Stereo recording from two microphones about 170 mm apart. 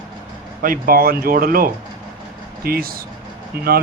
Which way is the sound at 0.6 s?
55° right (ahead or behind).